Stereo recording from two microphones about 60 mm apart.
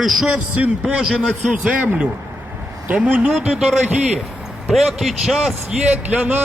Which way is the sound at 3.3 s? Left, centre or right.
Centre.